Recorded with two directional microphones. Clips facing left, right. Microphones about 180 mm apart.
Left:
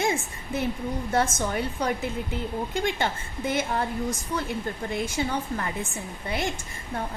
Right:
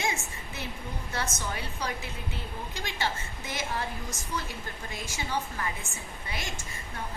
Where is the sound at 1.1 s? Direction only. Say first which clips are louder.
Left 9 dB; 50° left (ahead or behind).